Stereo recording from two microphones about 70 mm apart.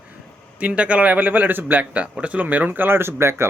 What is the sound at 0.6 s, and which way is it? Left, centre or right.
A man's voice, centre.